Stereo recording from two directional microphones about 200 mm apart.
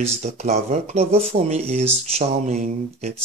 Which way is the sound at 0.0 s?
35° right (ahead or behind).